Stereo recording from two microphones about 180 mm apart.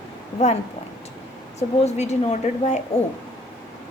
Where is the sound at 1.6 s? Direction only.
40° left (ahead or behind).